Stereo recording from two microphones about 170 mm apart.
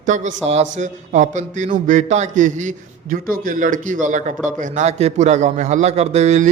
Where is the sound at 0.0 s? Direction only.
45° right (ahead or behind).